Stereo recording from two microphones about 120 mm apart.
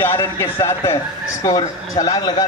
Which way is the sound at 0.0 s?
20° left (ahead or behind).